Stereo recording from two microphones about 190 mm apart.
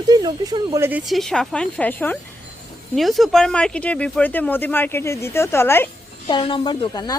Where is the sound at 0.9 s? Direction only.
5° right (ahead or behind); by 5.8 s 10° left (ahead or behind).